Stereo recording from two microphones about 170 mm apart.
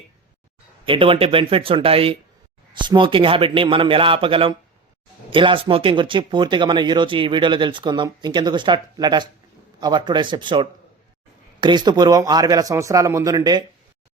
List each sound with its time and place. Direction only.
0.9 s a man's voice: 30° right (ahead or behind)